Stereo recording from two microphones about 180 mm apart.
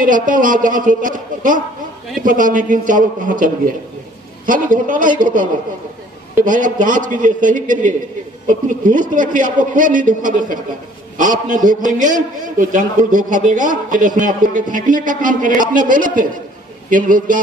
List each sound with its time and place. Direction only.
0.0 s a man's voice: 45° right (ahead or behind)